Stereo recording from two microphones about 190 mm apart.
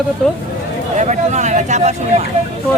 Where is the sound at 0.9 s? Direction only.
40° right (ahead or behind).